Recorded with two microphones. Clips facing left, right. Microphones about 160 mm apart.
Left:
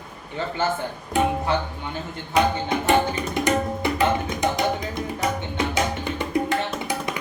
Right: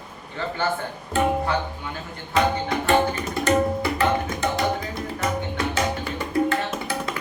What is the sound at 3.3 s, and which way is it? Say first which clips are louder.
Tabla: right 2 dB; 15° left (ahead or behind).